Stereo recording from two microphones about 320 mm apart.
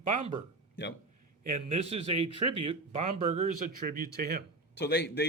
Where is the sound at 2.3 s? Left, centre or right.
Right.